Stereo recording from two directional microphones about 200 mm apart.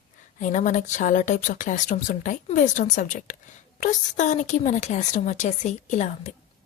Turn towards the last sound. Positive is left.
turn(degrees=35)  # may be behind; listen again after turning